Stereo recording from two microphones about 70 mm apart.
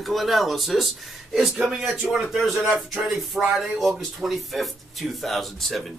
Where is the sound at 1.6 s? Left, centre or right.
Centre.